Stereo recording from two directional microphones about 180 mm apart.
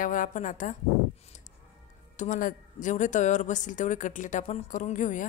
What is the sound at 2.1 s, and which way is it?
A woman's voice, 45° left (ahead or behind).